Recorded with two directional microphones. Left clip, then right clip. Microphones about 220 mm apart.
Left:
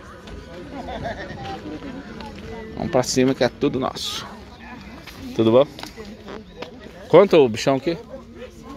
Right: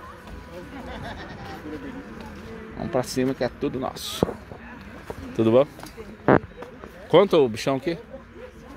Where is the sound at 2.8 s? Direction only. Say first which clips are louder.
Left 6 dB; 5° left (ahead or behind).